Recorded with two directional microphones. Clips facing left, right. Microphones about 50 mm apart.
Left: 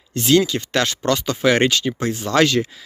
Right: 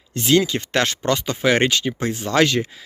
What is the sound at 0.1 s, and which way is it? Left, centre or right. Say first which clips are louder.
Speech: left 1 dB; centre.